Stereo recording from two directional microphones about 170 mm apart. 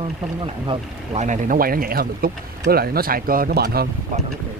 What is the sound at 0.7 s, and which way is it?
Speech, 45° right (ahead or behind).